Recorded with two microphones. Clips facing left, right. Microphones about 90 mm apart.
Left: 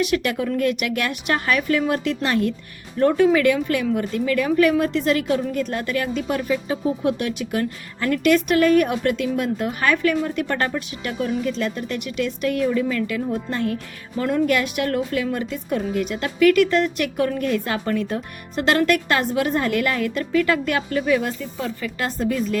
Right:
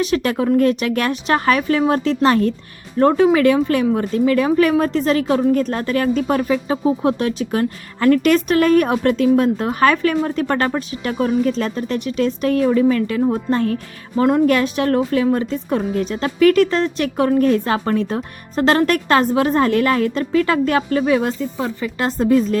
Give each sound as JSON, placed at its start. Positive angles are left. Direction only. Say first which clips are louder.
{"t": 0.0, "sound": "a woman's voice", "louder": "right 3 dB", "side_deg": -35}
{"t": 7.0, "sound": "a woman's voice", "louder": "right 4 dB", "side_deg": -30}
{"t": 8.0, "sound": "a woman's voice", "louder": "right 4 dB", "side_deg": -45}